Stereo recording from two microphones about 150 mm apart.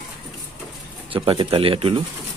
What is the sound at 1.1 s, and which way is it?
Speech, 35° right (ahead or behind).